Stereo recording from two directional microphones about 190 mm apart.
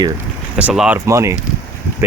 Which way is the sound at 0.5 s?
5° right (ahead or behind).